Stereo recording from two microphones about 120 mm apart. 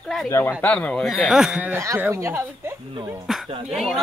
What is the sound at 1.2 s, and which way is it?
Speech, 5° right (ahead or behind).